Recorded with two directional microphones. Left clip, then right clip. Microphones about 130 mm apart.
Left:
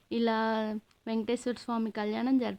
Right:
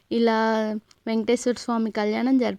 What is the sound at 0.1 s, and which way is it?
Speech, 45° right (ahead or behind).